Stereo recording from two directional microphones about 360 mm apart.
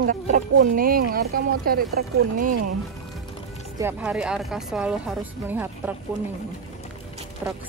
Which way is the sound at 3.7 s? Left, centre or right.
Centre.